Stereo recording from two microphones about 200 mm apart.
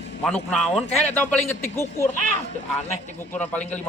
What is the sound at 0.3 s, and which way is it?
Speech, 5° left (ahead or behind).